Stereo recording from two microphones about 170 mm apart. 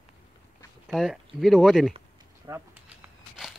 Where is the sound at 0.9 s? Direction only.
Centre (ahead or behind).